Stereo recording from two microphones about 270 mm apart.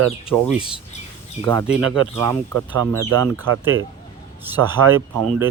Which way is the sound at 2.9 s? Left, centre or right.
Right.